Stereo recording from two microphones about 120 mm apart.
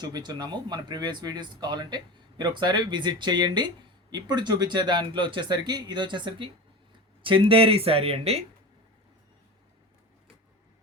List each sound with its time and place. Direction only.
0.0 s speech: 35° right (ahead or behind); by 8.4 s 60° right (ahead or behind)